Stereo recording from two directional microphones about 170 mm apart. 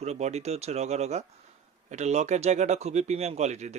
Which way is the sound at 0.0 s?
40° right (ahead or behind).